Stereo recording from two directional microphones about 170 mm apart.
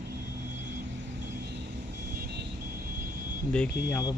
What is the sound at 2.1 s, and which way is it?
Vehicle, 70° right (ahead or behind).